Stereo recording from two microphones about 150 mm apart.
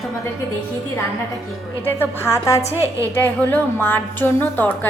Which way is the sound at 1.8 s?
15° left (ahead or behind).